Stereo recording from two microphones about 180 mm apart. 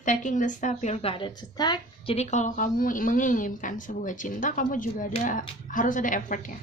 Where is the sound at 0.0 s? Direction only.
45° left (ahead or behind); by 2.1 s 25° left (ahead or behind).